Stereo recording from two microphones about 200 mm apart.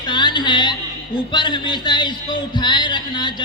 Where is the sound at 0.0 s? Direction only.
20° left (ahead or behind).